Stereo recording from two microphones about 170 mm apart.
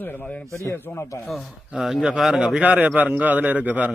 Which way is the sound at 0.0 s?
10° left (ahead or behind).